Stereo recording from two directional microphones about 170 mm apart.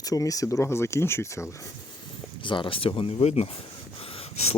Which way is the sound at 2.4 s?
30° left (ahead or behind).